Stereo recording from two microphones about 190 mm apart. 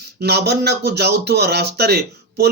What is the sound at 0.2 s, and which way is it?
Speech, 60° right (ahead or behind).